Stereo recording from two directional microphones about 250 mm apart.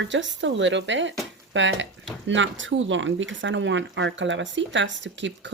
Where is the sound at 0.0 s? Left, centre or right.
Right.